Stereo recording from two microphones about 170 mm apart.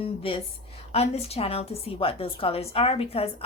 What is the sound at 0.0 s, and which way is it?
A woman's voice, 35° left (ahead or behind).